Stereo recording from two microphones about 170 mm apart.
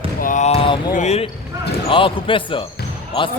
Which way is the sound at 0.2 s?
50° left (ahead or behind).